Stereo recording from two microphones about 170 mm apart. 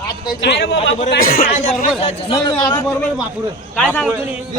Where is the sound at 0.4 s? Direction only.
90° left.